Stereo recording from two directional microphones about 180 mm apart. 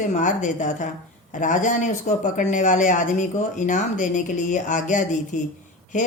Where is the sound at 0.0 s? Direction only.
45° left (ahead or behind).